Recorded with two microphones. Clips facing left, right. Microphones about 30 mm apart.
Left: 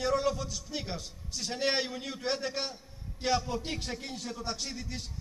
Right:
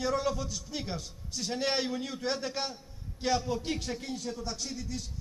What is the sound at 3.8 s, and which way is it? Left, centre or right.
A man's voice, left.